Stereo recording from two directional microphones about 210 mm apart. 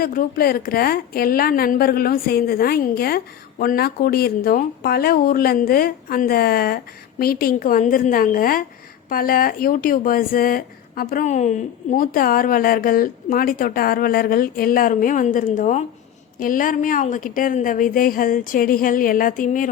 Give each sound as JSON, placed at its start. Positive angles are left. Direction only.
{"t": 0.0, "sound": "a woman's voice", "side_deg": 45}